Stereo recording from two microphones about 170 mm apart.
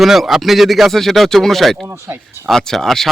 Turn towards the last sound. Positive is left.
turn(degrees=0)  # may be behind; listen again after turning